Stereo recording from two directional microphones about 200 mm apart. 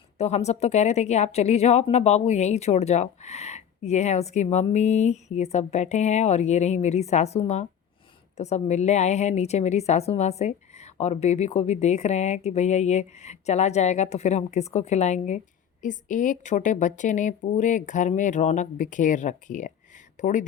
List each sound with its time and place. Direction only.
0.2 s a woman's voice: 35° left (ahead or behind)